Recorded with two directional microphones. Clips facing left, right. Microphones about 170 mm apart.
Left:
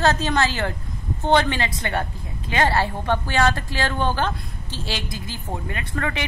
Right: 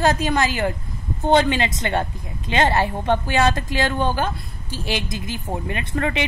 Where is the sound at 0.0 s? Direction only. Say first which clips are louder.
Right 1 dB; 10° right (ahead or behind).